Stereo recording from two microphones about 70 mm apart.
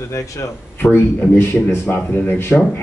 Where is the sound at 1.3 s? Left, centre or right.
Left.